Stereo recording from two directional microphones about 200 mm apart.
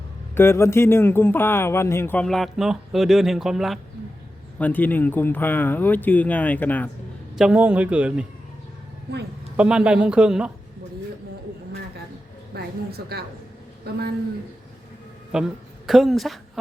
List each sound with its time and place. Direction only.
0.3 s a man's voice: 10° left (ahead or behind)
7.3 s speech: 5° right (ahead or behind)
9.6 s speech: 5° right (ahead or behind)
12.5 s a woman's voice: 55° right (ahead or behind)
15.3 s speech: 5° right (ahead or behind)